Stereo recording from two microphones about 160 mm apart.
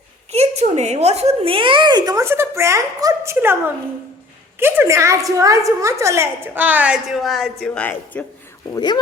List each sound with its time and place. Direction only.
0.3 s a woman's voice: 45° right (ahead or behind); by 3.6 s 15° right (ahead or behind)
4.6 s a woman's voice: 15° right (ahead or behind); by 8.2 s 10° left (ahead or behind)
8.7 s speech: 25° left (ahead or behind)